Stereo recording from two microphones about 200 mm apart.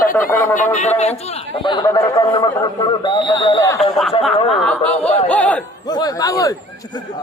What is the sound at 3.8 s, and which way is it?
A man's voice, centre (ahead or behind).